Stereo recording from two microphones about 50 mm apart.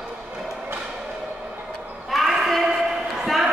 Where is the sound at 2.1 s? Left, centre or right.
Centre.